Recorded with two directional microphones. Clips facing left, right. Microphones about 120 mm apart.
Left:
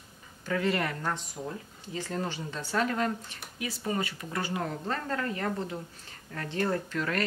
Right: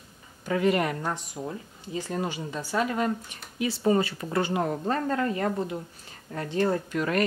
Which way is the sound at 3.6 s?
30° right (ahead or behind).